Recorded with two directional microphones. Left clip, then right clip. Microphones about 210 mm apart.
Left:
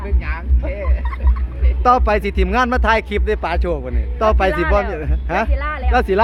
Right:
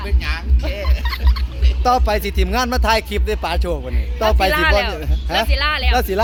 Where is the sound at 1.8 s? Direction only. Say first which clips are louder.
Left 2 dB; 10° left (ahead or behind).